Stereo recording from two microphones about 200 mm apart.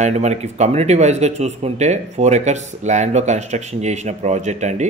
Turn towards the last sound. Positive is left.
turn(degrees=-35)  # may be behind; listen again after turning